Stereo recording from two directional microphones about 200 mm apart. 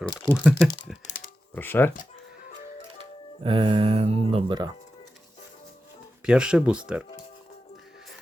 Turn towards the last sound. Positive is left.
turn(degrees=-5)  # may be behind; listen again after turning